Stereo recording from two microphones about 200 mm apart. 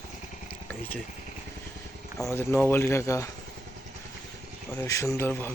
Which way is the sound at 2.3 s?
10° left (ahead or behind).